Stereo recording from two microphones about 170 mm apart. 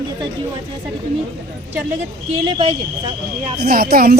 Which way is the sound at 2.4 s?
30° right (ahead or behind).